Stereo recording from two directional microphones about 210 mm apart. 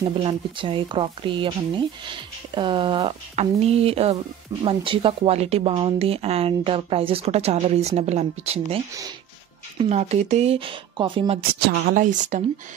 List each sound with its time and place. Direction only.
0.2 s speech: 25° right (ahead or behind)
11.6 s a woman's voice: 45° right (ahead or behind)